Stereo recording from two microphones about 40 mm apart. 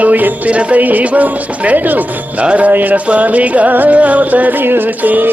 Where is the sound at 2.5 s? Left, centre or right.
Right.